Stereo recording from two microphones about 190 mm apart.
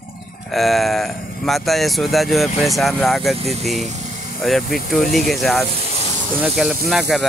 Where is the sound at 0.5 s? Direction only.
Centre (ahead or behind).